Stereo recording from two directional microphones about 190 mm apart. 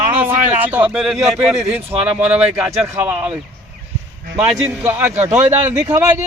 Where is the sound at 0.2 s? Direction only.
10° right (ahead or behind).